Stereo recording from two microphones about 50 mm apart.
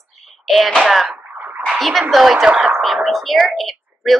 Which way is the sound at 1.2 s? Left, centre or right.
Right.